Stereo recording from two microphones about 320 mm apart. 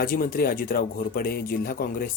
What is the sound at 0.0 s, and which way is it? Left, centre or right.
Speech, left.